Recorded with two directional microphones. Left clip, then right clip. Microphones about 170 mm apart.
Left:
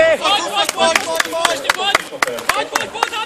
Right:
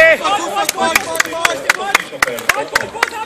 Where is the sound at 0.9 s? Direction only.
15° left (ahead or behind).